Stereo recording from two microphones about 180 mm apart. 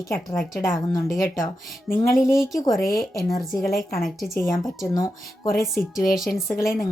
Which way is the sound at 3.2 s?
20° left (ahead or behind).